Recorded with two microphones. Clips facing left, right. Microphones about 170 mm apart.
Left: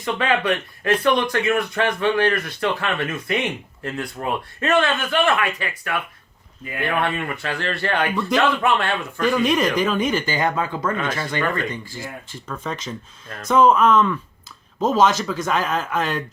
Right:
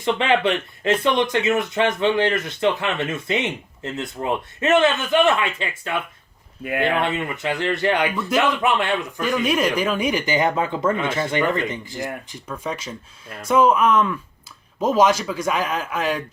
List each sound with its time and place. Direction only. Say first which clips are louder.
0.0 s speech: right 2 dB; 25° right (ahead or behind)
9.2 s speech: left 3 dB; 5° right (ahead or behind)